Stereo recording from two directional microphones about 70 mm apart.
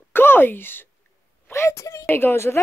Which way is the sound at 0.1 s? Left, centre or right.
Left.